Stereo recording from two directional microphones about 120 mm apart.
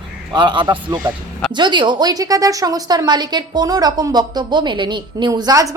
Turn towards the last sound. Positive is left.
turn(degrees=-30)  # may be behind; listen again after turning